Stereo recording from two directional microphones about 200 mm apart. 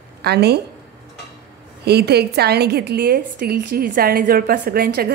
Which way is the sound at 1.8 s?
55° right (ahead or behind).